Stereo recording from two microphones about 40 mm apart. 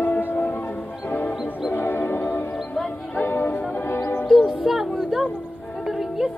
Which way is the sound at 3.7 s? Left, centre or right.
Left.